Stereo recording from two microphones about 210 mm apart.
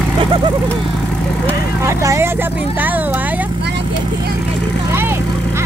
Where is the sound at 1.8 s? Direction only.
15° right (ahead or behind).